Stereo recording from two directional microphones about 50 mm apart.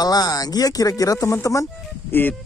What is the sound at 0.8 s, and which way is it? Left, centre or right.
Speech, left.